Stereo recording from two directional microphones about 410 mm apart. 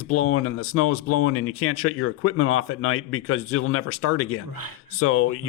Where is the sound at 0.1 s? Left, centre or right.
Left.